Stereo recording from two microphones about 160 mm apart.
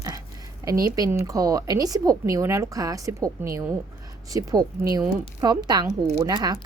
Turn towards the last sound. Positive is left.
turn(degrees=-25)  # may be behind; listen again after turning